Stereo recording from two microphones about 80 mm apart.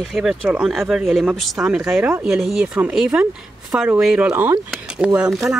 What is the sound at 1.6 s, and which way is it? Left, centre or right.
Speech, centre.